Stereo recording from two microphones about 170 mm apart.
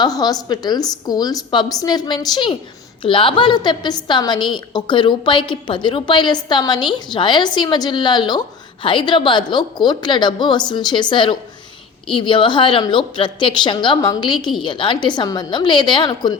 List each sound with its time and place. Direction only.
0.0 s a woman's voice: 20° left (ahead or behind)